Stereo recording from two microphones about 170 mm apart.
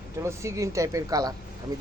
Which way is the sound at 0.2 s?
15° right (ahead or behind).